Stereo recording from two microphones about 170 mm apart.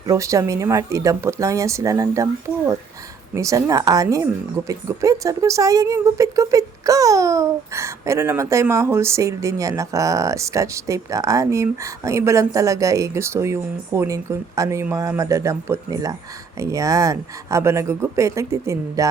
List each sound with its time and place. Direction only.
0.1 s speech: 20° right (ahead or behind)